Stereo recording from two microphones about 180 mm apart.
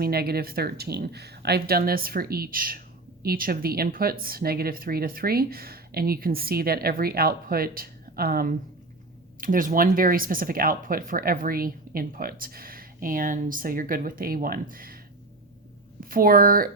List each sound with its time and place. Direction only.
0.0 s speech: 60° right (ahead or behind)
16.0 s speech: 50° right (ahead or behind)